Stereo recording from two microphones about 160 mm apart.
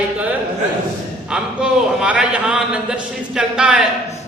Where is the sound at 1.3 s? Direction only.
5° right (ahead or behind).